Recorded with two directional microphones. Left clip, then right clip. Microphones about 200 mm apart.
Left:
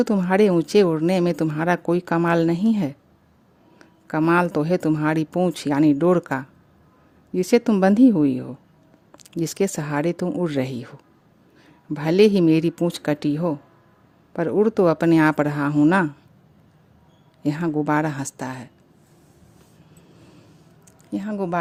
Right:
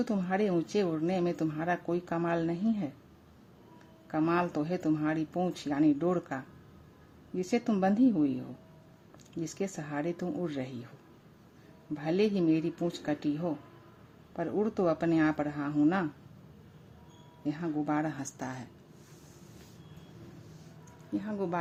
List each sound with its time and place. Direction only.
0.0 s speech: 55° left (ahead or behind)
4.0 s speech: 55° left (ahead or behind)
11.9 s speech: 55° left (ahead or behind)
17.4 s speech: 55° left (ahead or behind)
21.1 s speech: 50° left (ahead or behind)